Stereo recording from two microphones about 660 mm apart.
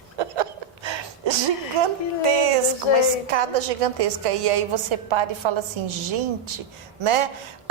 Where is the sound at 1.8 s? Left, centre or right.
Right.